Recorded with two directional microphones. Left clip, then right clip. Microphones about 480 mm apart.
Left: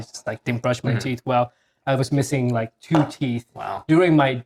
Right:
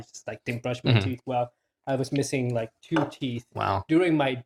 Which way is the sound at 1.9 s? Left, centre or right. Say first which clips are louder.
Left 5 dB; left.